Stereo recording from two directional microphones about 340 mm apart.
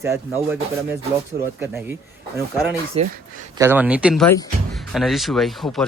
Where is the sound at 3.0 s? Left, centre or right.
Centre.